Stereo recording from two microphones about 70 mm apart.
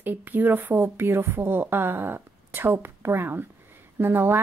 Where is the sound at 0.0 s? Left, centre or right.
Right.